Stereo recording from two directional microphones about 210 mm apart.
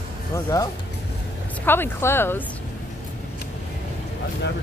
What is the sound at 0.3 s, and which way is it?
Speech, 15° left (ahead or behind).